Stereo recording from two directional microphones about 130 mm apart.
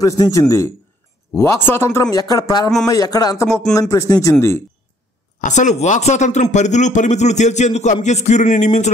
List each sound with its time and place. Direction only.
0.0 s speech: 25° left (ahead or behind)
5.4 s speech: 70° left (ahead or behind)